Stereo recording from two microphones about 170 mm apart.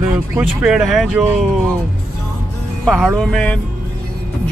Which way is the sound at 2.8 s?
Centre (ahead or behind).